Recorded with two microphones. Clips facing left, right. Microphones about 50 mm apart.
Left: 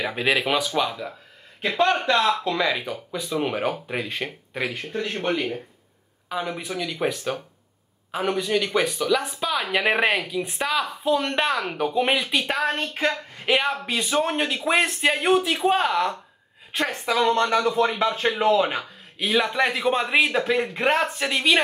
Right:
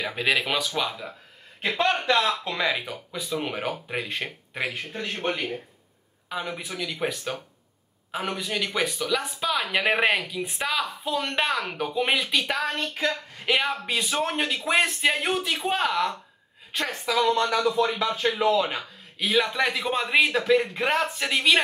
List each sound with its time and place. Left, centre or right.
0.0 s a man's voice: centre
1.6 s a man's voice: centre
12.7 s speech: left
13.5 s speech: centre
17.0 s speech: centre
18.8 s a man's voice: centre